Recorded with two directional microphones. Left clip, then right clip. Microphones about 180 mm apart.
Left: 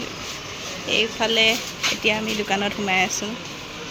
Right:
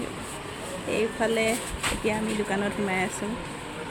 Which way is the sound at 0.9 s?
5° right (ahead or behind).